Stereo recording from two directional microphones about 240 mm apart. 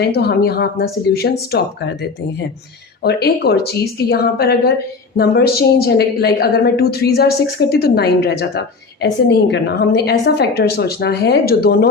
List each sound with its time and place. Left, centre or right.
0.0 s a woman's voice: left
3.0 s a woman's voice: left